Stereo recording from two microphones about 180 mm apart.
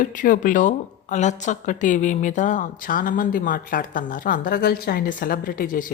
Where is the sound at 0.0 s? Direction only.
45° left (ahead or behind).